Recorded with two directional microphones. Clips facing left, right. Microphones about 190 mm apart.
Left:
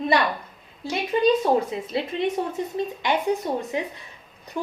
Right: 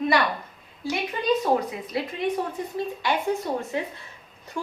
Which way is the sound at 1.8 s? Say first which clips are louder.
Left 2 dB; 25° left (ahead or behind).